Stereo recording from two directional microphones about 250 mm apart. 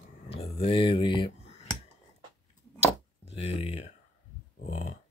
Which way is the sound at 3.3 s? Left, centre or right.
Left.